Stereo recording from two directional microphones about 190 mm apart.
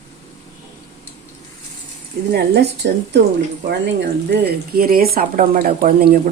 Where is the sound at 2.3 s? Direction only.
60° right (ahead or behind).